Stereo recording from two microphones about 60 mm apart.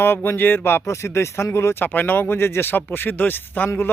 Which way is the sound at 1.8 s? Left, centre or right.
Left.